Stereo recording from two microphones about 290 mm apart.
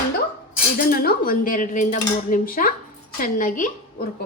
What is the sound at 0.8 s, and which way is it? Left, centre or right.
A woman's voice, left.